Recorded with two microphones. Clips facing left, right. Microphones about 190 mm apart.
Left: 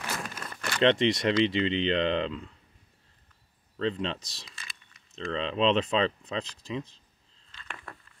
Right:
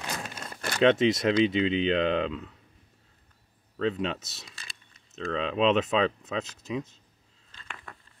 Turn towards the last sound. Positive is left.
turn(degrees=0)  # may be behind; listen again after turning